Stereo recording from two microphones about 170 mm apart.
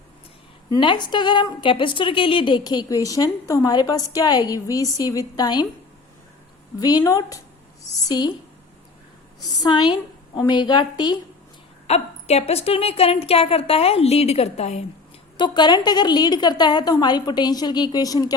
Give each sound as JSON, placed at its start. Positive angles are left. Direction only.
{"t": 0.7, "sound": "a woman's voice", "side_deg": 25}
{"t": 6.7, "sound": "a woman's voice", "side_deg": 25}
{"t": 9.4, "sound": "a woman's voice", "side_deg": 20}
{"t": 11.9, "sound": "a woman's voice", "side_deg": 40}
{"t": 15.4, "sound": "a woman's voice", "side_deg": 25}